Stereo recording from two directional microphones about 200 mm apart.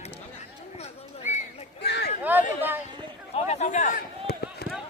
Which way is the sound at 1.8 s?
55° left (ahead or behind).